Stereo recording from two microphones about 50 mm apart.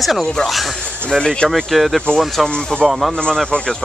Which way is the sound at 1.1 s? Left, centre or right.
Centre.